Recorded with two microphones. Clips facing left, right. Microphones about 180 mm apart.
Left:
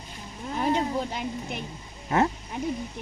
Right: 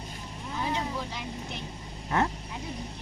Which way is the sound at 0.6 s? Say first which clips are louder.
Left 7 dB; 55° left (ahead or behind).